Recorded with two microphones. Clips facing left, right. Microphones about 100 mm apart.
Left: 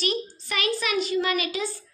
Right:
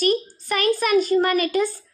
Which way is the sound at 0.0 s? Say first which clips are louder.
Right 7 dB; 45° right (ahead or behind).